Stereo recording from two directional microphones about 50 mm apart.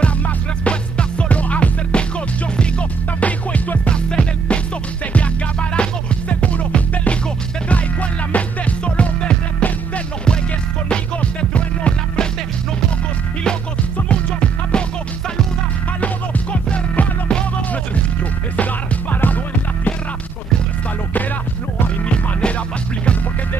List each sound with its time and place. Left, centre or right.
0.7 s music: left
14.0 s music: left
16.7 s music: left
18.6 s music: left